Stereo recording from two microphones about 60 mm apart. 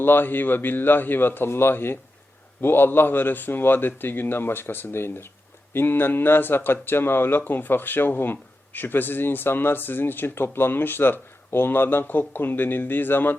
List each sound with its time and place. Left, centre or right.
0.0 s a man's voice: left